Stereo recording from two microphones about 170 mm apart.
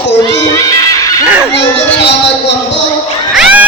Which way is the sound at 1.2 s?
10° right (ahead or behind).